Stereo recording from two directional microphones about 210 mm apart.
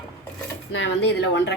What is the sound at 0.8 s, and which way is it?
Speech, 55° left (ahead or behind).